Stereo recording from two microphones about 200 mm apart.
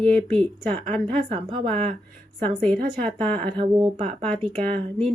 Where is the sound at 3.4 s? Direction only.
25° right (ahead or behind).